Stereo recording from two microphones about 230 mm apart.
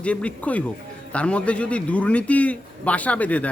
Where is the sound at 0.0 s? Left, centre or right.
Centre.